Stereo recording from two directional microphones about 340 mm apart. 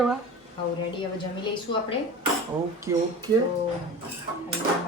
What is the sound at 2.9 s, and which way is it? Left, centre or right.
Speech, centre.